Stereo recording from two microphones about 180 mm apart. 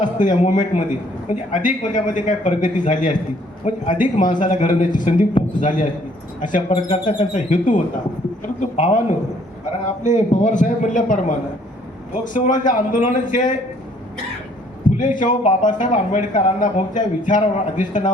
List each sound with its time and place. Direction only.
0.0 s a man's voice: 45° left (ahead or behind)
14.8 s a man's voice: 45° left (ahead or behind)